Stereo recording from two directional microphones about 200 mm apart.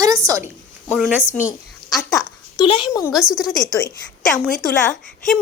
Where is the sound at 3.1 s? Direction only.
5° right (ahead or behind).